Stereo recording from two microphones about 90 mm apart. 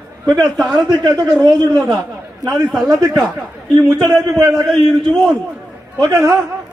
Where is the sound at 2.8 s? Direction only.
45° right (ahead or behind).